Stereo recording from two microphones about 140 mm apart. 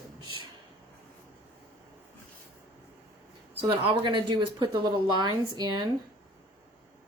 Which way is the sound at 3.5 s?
40° right (ahead or behind).